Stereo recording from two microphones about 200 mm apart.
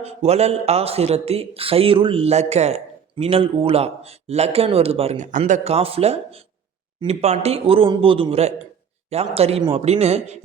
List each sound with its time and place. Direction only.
0.0 s speech: 30° right (ahead or behind)